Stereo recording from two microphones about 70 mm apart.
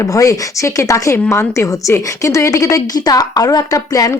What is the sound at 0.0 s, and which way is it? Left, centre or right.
A woman's voice, left.